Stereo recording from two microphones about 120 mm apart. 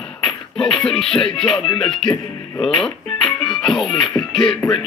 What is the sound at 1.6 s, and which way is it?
Music, 45° left (ahead or behind).